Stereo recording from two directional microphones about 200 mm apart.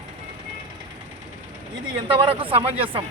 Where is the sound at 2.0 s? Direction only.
25° right (ahead or behind).